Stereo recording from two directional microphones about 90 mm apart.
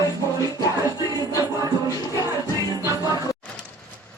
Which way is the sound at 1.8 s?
40° left (ahead or behind).